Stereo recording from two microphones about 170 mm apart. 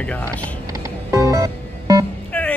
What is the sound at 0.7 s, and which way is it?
Music, 20° right (ahead or behind).